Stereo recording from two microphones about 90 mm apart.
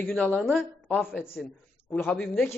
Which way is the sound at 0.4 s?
Centre (ahead or behind).